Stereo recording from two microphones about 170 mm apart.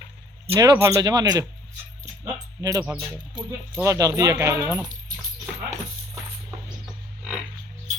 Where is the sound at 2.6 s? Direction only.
20° right (ahead or behind).